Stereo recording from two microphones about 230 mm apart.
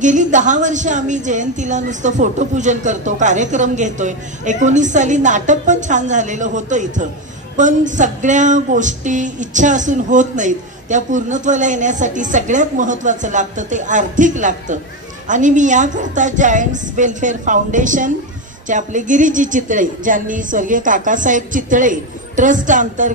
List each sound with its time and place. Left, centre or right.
0.0 s speech: right